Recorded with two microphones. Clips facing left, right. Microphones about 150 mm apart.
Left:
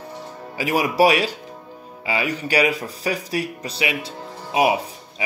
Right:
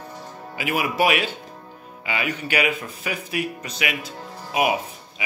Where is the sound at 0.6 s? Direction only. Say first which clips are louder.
Left 4 dB; 35° left (ahead or behind).